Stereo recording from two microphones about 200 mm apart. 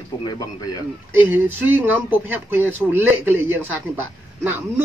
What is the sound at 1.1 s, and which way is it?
Speech, 10° right (ahead or behind).